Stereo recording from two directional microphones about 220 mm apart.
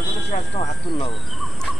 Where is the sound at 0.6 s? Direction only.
20° left (ahead or behind).